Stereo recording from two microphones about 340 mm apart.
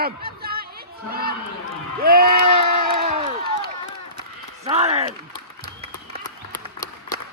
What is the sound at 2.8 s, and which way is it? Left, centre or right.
Crowd, right.